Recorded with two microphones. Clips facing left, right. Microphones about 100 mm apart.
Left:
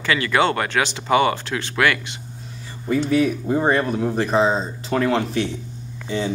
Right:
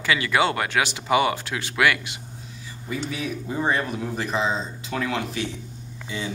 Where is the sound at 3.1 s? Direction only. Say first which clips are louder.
Left 11 dB; 45° left (ahead or behind).